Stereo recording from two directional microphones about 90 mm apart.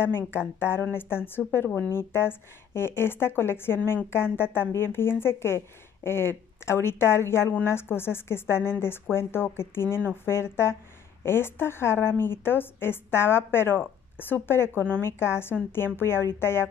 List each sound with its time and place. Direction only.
0.0 s speech: 25° left (ahead or behind)